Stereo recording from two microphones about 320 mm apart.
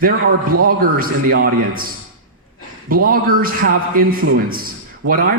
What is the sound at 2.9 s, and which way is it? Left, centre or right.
A woman's voice, right.